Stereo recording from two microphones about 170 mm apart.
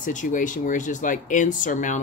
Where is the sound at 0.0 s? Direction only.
50° left (ahead or behind).